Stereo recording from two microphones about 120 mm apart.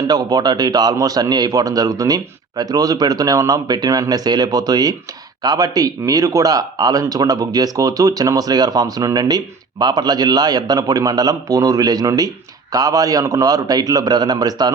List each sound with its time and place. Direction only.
0.1 s speech: 35° right (ahead or behind)